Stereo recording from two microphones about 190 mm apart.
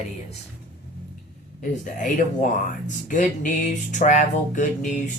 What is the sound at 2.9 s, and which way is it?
Speech, 40° left (ahead or behind).